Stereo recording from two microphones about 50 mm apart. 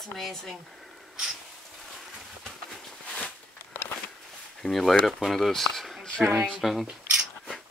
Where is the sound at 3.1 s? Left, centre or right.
Centre.